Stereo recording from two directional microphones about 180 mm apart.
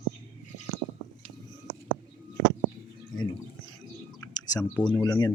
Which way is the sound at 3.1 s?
20° left (ahead or behind).